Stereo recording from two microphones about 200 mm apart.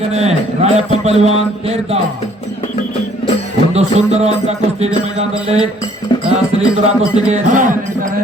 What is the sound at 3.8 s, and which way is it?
Music, 30° right (ahead or behind).